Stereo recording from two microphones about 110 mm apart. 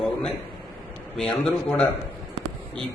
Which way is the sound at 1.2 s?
5° left (ahead or behind).